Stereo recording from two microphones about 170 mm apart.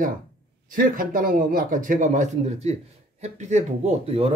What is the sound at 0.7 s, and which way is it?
Speech, 55° right (ahead or behind).